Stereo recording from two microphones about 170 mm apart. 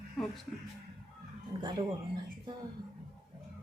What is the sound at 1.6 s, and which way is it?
Speech, 25° right (ahead or behind).